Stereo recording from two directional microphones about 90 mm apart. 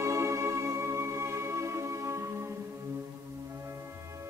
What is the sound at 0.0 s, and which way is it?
Music, 30° right (ahead or behind).